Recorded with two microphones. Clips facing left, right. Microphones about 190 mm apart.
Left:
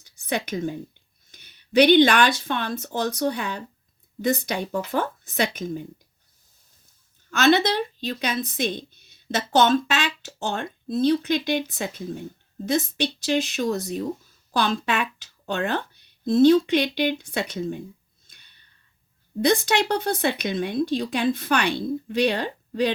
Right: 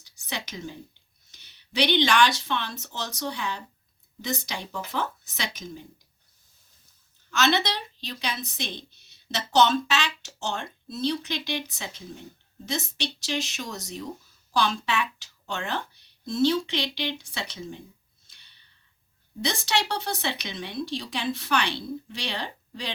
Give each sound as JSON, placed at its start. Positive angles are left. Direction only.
{"t": 0.0, "sound": "speech", "side_deg": 55}
{"t": 7.3, "sound": "speech", "side_deg": 50}
{"t": 18.3, "sound": "gasp", "side_deg": 50}
{"t": 19.4, "sound": "speech", "side_deg": 55}